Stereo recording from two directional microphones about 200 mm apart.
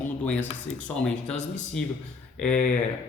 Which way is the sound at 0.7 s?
90° left.